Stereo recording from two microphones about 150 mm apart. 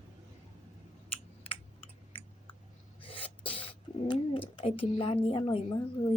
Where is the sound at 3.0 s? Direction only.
35° left (ahead or behind).